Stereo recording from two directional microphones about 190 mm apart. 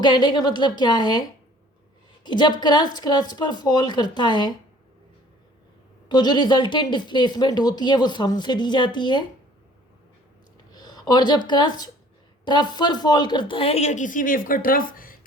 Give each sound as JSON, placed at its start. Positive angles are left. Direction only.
{"t": 0.0, "sound": "a woman's voice", "side_deg": 25}
{"t": 2.2, "sound": "a woman's voice", "side_deg": 25}
{"t": 6.1, "sound": "a woman's voice", "side_deg": 25}
{"t": 10.8, "sound": "a woman's voice", "side_deg": 20}